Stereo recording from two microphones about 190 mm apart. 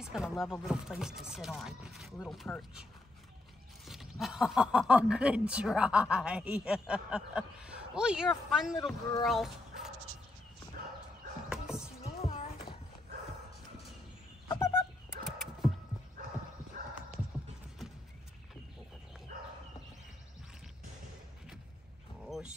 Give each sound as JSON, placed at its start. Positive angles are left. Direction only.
{"t": 0.0, "sound": "speech", "side_deg": -5}
{"t": 11.4, "sound": "music", "side_deg": -5}
{"t": 12.0, "sound": "music", "side_deg": 30}
{"t": 14.5, "sound": "fowl", "side_deg": 15}
{"t": 15.2, "sound": "a sound", "side_deg": 0}
{"t": 22.2, "sound": "a sound", "side_deg": 0}